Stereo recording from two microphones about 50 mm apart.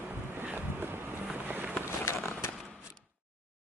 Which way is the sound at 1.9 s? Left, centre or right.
Left.